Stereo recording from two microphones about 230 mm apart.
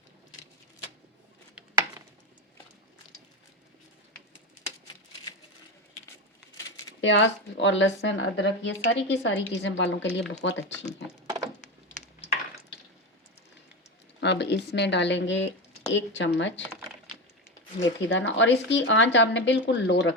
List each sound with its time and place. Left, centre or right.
7.0 s speech: left
14.2 s speech: left
17.7 s speech: left